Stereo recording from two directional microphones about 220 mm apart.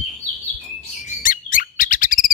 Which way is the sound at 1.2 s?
40° left (ahead or behind).